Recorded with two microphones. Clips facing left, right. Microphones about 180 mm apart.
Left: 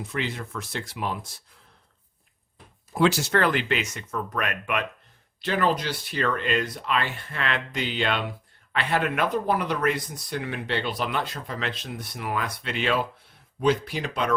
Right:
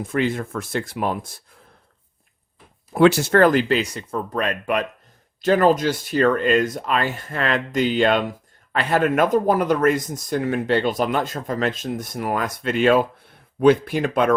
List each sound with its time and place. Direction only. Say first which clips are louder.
0.0 s speech: right 9 dB; 50° right (ahead or behind)
2.9 s speech: right 7 dB; 60° right (ahead or behind)